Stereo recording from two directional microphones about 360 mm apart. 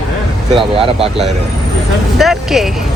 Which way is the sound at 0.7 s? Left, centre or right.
Centre.